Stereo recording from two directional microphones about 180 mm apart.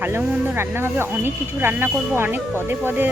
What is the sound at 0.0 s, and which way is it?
Speech, 10° right (ahead or behind).